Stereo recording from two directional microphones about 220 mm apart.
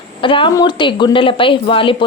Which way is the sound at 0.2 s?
25° left (ahead or behind).